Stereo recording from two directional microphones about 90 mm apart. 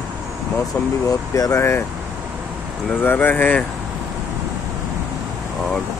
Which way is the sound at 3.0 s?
25° left (ahead or behind).